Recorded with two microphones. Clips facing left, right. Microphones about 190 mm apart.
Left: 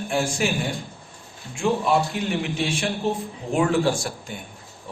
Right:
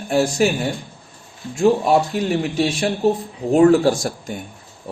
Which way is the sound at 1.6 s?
40° right (ahead or behind).